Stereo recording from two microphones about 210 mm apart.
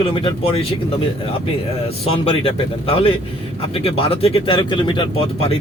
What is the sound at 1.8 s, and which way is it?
Speech, 25° left (ahead or behind).